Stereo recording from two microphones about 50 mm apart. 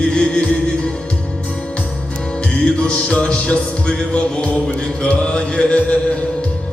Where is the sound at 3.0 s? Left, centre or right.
Left.